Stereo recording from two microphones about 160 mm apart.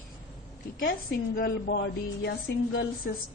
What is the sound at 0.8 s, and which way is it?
A woman's voice, 70° left (ahead or behind).